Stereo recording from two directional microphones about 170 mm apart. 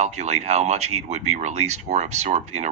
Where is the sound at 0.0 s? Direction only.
40° right (ahead or behind).